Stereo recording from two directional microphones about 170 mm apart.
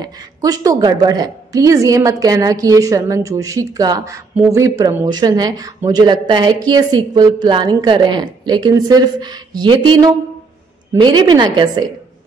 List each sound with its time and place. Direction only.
0.0 s a woman's voice: 20° right (ahead or behind)